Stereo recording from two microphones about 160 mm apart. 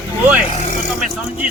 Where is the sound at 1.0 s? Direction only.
5° right (ahead or behind).